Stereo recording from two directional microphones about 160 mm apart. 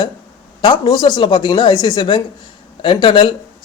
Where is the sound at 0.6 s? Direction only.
25° left (ahead or behind).